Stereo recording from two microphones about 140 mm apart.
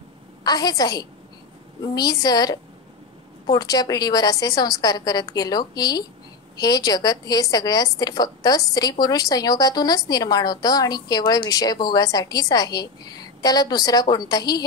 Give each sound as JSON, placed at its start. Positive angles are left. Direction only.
{"t": 0.4, "sound": "a woman's voice", "side_deg": 25}